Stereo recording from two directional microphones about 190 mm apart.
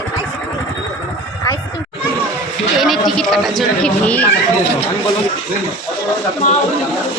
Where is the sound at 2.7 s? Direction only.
Centre (ahead or behind).